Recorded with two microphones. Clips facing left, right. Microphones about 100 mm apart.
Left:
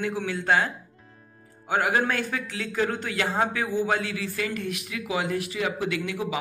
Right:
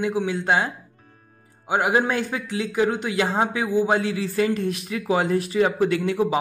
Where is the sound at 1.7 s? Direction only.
20° right (ahead or behind).